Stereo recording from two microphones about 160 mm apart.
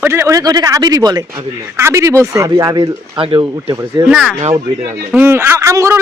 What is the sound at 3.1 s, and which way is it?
Speech, 35° right (ahead or behind).